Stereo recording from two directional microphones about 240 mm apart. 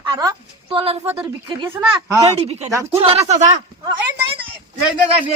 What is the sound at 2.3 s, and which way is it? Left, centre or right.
Speech, right.